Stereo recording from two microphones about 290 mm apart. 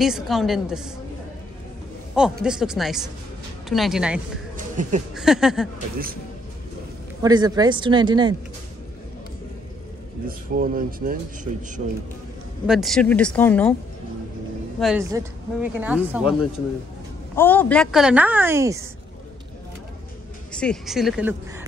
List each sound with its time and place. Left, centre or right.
0.0 s a woman's voice: centre
2.4 s a woman's voice: centre
4.6 s a sound: right
5.1 s a woman's voice: centre
7.2 s speech: centre
10.2 s speech: right
12.6 s a woman's voice: centre
14.8 s a woman's voice: centre
17.4 s a woman's voice: centre
20.5 s a woman's voice: centre